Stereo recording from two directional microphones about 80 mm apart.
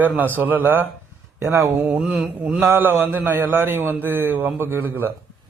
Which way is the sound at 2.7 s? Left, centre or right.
Right.